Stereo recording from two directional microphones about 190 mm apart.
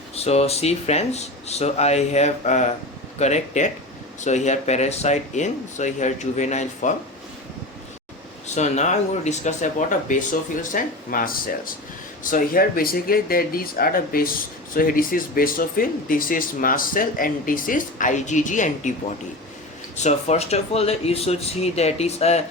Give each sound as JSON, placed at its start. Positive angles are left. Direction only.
{"t": 0.2, "sound": "speech", "side_deg": 35}
{"t": 8.4, "sound": "speech", "side_deg": 35}
{"t": 20.0, "sound": "speech", "side_deg": 35}